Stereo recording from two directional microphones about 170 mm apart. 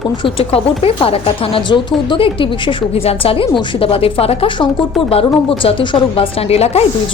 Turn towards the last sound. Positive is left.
turn(degrees=35)  # may be behind; listen again after turning